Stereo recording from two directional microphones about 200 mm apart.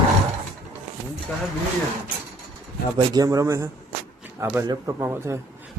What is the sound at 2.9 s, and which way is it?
Speech, 20° right (ahead or behind).